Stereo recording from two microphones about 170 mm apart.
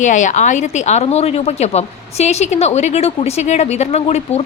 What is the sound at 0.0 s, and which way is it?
A woman's voice, 45° left (ahead or behind).